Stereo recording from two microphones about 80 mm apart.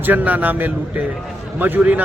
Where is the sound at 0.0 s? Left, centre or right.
Right.